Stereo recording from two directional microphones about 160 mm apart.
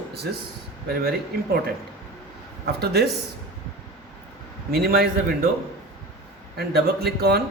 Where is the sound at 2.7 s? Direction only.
80° right.